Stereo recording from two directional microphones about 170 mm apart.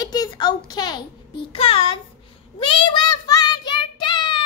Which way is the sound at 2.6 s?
30° left (ahead or behind).